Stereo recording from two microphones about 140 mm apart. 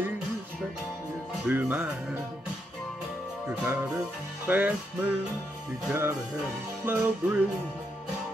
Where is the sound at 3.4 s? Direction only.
15° right (ahead or behind).